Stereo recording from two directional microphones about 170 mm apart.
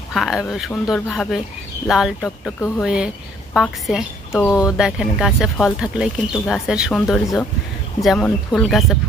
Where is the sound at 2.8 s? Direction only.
5° right (ahead or behind).